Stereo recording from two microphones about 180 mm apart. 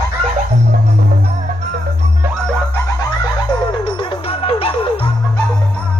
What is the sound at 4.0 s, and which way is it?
Music, 30° left (ahead or behind).